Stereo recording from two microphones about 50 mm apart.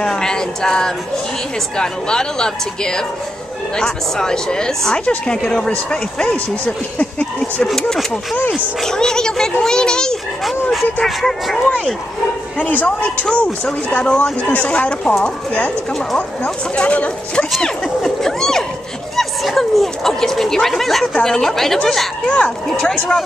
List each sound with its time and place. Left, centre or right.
0.0 s a sound: centre
1.8 s a woman's voice: centre
7.6 s a woman's voice: centre
10.4 s speech: centre
12.5 s speech: left
16.2 s speech: left
17.6 s a woman's voice: centre
22.2 s a woman's voice: left